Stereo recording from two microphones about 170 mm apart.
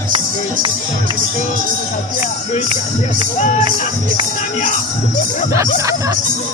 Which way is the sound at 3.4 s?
45° left (ahead or behind).